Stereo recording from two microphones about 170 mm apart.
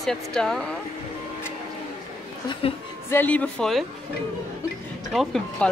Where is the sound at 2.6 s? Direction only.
35° left (ahead or behind).